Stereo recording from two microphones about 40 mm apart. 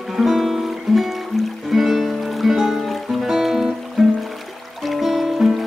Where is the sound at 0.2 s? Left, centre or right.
Centre.